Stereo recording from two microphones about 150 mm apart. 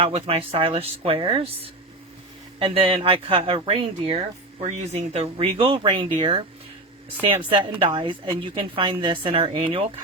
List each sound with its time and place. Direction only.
0.0 s speech: 40° right (ahead or behind)
2.6 s speech: 35° right (ahead or behind)
4.6 s speech: 45° right (ahead or behind)
7.8 s speech: 35° right (ahead or behind)